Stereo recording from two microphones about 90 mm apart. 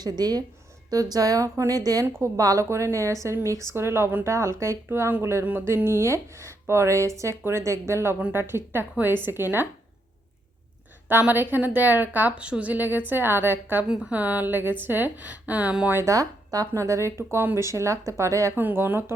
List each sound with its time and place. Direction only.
0.0 s a woman's voice: 45° right (ahead or behind); by 9.6 s 25° right (ahead or behind)
11.1 s speech: 20° right (ahead or behind)
13.8 s a woman's voice: 10° right (ahead or behind)
16.0 s a woman's voice: 40° right (ahead or behind)
18.5 s speech: 25° right (ahead or behind)